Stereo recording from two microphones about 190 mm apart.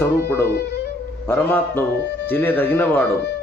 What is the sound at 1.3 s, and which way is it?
Speech, 10° left (ahead or behind).